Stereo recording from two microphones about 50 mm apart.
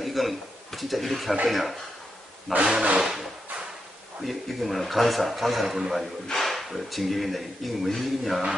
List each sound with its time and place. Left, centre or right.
0.0 s a man's voice: centre
2.6 s speech: centre
3.0 s a sound: centre
4.2 s speech: centre